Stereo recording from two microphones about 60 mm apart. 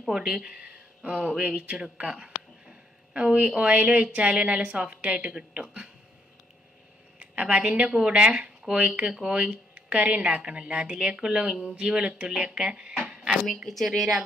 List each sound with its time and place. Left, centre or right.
0.1 s speech: centre
1.4 s a sound: centre
3.4 s speech: centre
7.2 s speech: right
13.7 s speech: centre